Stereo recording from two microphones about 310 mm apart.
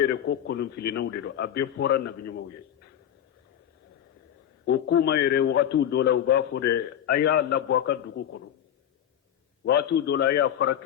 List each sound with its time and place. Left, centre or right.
0.1 s a man's voice: left
4.6 s a man's voice: left
9.6 s a man's voice: left